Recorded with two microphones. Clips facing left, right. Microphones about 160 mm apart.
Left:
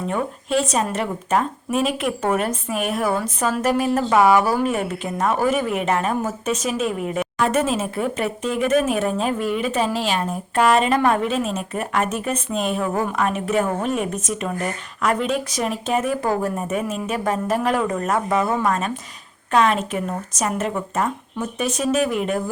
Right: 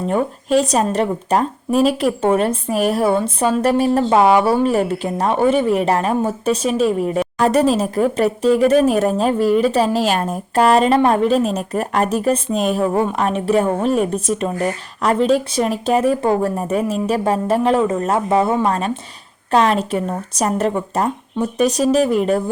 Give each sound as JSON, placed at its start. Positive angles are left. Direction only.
{"t": 0.1, "sound": "speech", "side_deg": -35}